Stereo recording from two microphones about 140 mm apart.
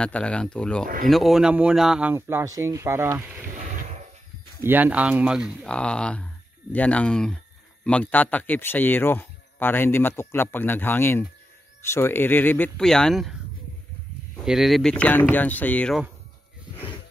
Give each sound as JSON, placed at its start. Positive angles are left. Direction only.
{"t": 0.0, "sound": "speech", "side_deg": 5}
{"t": 2.1, "sound": "speech", "side_deg": -20}
{"t": 4.6, "sound": "speech", "side_deg": -15}
{"t": 5.7, "sound": "speech", "side_deg": 5}
{"t": 14.4, "sound": "speech", "side_deg": 0}